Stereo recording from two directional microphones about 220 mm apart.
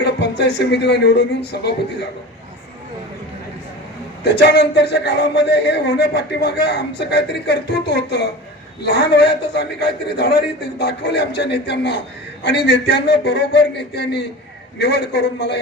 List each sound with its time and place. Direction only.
0.0 s a woman's voice: 50° left (ahead or behind)
4.2 s a man's voice: 50° left (ahead or behind)